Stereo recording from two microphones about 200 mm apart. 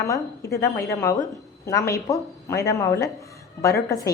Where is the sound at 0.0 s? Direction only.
15° left (ahead or behind).